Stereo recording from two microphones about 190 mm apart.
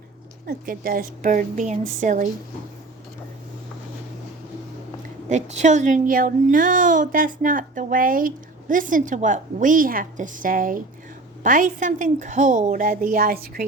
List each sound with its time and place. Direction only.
0.4 s a woman's voice: 50° right (ahead or behind)
5.3 s a woman's voice: 40° right (ahead or behind)